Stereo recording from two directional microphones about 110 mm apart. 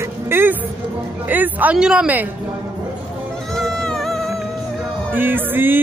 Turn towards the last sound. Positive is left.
turn(degrees=-20)  # may be behind; listen again after turning